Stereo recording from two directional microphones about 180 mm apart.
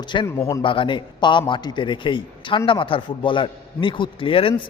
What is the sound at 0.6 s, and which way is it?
A man's voice, 30° left (ahead or behind).